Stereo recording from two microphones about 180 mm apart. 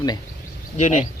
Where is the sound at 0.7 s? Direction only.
45° left (ahead or behind).